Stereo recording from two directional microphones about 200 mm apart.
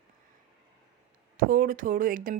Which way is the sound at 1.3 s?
45° right (ahead or behind).